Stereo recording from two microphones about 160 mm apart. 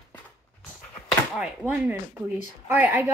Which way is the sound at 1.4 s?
10° right (ahead or behind).